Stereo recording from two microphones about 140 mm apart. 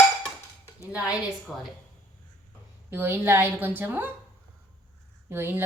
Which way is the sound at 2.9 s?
15° right (ahead or behind).